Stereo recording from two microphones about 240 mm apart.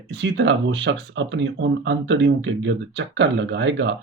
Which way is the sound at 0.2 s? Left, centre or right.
Right.